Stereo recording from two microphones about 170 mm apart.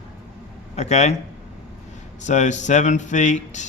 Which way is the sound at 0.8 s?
40° left (ahead or behind).